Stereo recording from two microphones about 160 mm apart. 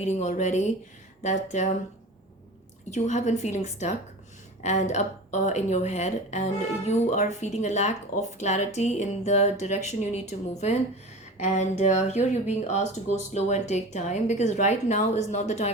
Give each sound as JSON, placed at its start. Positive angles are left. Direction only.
{"t": 0.0, "sound": "speech", "side_deg": 45}
{"t": 2.9, "sound": "speech", "side_deg": 45}